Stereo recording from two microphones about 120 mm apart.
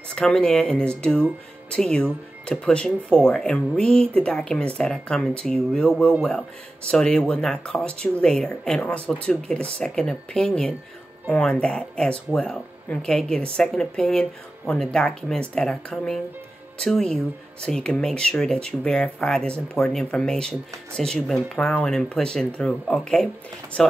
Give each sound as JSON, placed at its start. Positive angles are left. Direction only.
{"t": 0.1, "sound": "speech", "side_deg": 5}